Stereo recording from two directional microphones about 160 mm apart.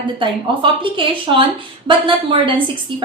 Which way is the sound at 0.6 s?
30° right (ahead or behind).